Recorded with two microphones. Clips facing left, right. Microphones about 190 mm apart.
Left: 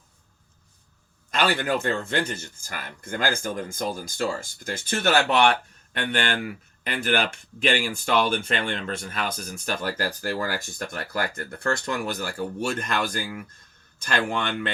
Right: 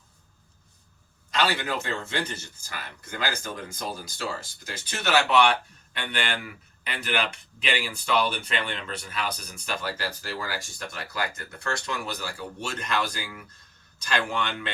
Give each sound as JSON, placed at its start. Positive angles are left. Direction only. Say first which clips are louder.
{"t": 1.3, "sound": "speech", "louder": "left 3 dB", "side_deg": 50}